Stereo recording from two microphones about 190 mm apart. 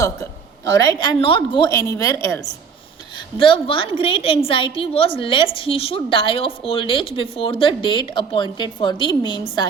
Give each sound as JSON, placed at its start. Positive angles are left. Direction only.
{"t": 0.0, "sound": "a sound", "side_deg": 15}
{"t": 0.8, "sound": "a woman's voice", "side_deg": 20}
{"t": 3.3, "sound": "a woman's voice", "side_deg": 25}